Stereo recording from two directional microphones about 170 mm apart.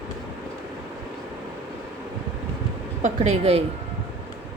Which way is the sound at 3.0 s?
40° right (ahead or behind).